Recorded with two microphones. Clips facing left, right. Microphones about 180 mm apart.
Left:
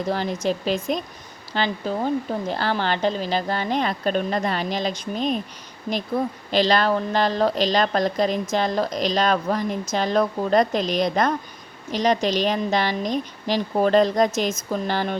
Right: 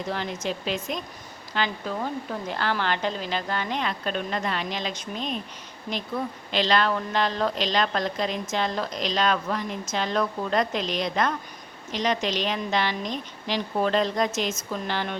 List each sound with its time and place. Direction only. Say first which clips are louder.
0.1 s a woman's voice: left 6 dB; 35° left (ahead or behind)